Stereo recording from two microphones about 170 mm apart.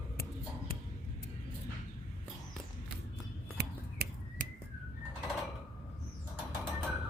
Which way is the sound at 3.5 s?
65° right (ahead or behind).